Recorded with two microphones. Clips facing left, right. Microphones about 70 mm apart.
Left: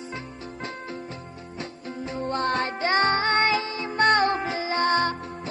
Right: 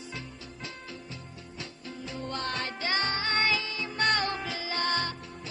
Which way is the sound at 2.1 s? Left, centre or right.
Left.